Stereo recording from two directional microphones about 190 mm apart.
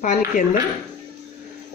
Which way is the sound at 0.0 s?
40° left (ahead or behind).